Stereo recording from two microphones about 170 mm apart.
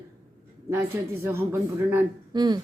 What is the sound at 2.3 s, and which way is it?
Speech, 25° right (ahead or behind).